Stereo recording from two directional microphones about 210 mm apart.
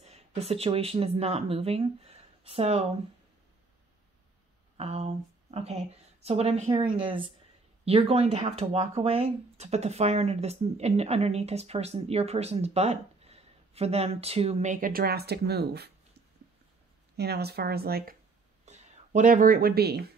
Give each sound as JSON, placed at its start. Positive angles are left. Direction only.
{"t": 0.0, "sound": "speech", "side_deg": -30}
{"t": 4.7, "sound": "speech", "side_deg": -30}
{"t": 17.2, "sound": "speech", "side_deg": -50}
{"t": 18.7, "sound": "speech", "side_deg": -35}